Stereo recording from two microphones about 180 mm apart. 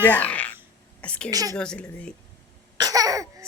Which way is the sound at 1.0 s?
5° left (ahead or behind).